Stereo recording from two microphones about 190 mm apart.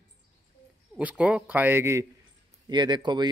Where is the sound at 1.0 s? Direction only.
5° right (ahead or behind).